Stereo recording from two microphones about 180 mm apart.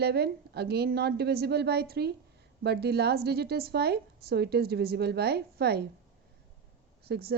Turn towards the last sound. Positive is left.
turn(degrees=-60)  # may be behind; listen again after turning